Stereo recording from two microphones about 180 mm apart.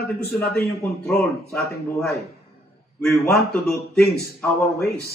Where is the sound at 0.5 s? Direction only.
15° left (ahead or behind).